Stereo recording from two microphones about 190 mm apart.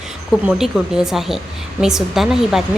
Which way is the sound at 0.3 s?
Centre (ahead or behind).